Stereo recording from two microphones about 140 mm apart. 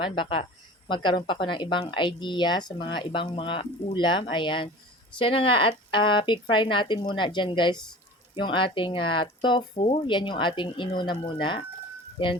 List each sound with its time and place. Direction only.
0.0 s speech: 40° left (ahead or behind)